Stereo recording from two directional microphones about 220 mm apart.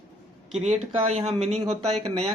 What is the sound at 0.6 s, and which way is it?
Speech, 30° right (ahead or behind).